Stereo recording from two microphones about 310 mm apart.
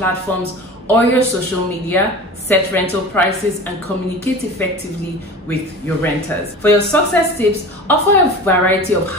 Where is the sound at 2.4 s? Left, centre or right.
Centre.